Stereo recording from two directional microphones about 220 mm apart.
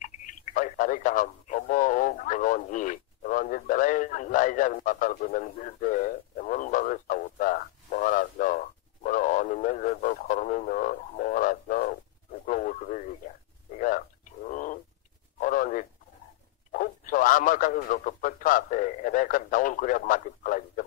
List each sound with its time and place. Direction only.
0.0 s speech: 35° left (ahead or behind)